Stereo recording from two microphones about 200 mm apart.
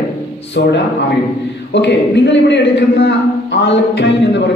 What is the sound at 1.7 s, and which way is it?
Speech, 60° left (ahead or behind).